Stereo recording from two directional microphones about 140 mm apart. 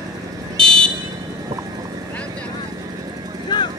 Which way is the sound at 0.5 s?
5° left (ahead or behind).